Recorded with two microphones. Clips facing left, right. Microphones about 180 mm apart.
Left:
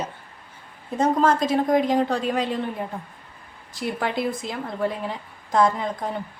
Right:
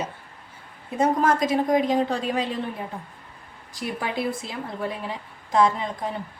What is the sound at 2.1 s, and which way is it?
Speech, 40° left (ahead or behind).